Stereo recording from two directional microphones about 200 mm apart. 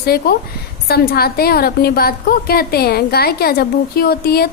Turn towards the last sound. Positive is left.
turn(degrees=50)  # may be behind; listen again after turning